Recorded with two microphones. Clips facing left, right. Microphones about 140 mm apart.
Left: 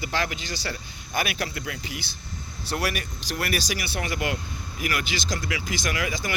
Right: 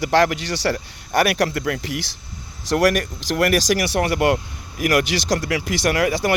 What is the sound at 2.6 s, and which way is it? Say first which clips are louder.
A man's voice: right 11 dB; 90° right.